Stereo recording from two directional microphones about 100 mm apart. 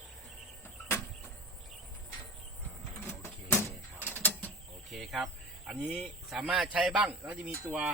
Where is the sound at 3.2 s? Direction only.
30° left (ahead or behind).